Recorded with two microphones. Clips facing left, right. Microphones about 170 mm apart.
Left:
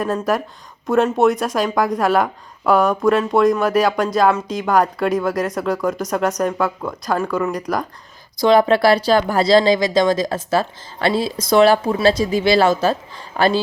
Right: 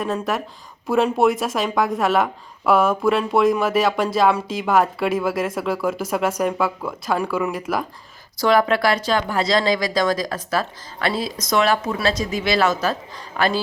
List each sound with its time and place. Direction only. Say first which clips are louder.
0.0 s a woman's voice: left 4 dB; centre (ahead or behind)
8.4 s speech: left 4 dB; 25° left (ahead or behind)